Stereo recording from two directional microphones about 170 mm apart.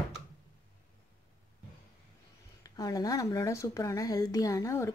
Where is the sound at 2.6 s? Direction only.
20° left (ahead or behind).